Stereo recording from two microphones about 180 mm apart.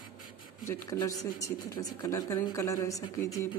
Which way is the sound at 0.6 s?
15° left (ahead or behind).